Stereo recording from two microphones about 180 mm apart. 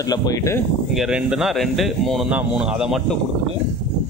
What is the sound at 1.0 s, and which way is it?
A man's voice, 5° right (ahead or behind).